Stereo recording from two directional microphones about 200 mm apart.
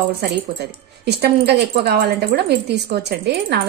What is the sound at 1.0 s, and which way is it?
Speech, 55° right (ahead or behind).